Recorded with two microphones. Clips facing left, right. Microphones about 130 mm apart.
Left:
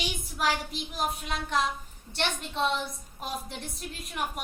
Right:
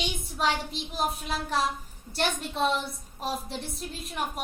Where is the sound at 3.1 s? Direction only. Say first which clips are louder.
Right 4 dB; centre (ahead or behind).